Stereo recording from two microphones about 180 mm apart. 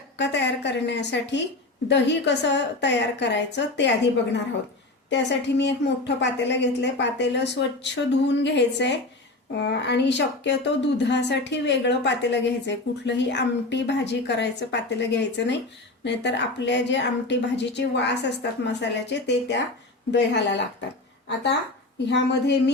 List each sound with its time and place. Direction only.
0.2 s speech: 75° left (ahead or behind)
22.1 s speech: 75° left (ahead or behind)